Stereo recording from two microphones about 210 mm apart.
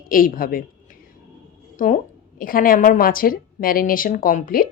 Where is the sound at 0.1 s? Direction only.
40° left (ahead or behind).